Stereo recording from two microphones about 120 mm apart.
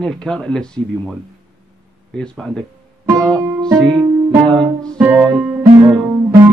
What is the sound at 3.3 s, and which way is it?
Music, 25° right (ahead or behind).